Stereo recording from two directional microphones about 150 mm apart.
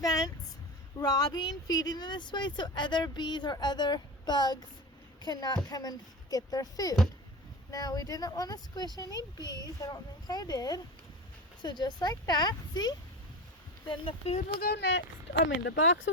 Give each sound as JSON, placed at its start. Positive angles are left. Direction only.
{"t": 0.0, "sound": "speech", "side_deg": 25}
{"t": 14.6, "sound": "speech", "side_deg": 90}